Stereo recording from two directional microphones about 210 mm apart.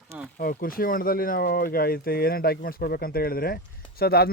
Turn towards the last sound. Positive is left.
turn(degrees=45)  # may be behind; listen again after turning